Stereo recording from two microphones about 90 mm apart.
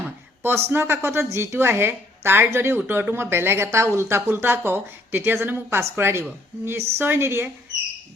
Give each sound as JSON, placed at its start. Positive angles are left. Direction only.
{"t": 0.4, "sound": "a woman's voice", "side_deg": -25}